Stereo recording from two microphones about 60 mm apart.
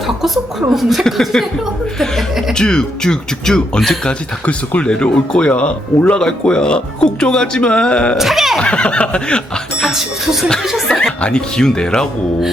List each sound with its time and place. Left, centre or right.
0.7 s speech: centre
4.4 s speech: left
8.2 s speech: centre
8.5 s speech: centre
9.8 s speech: centre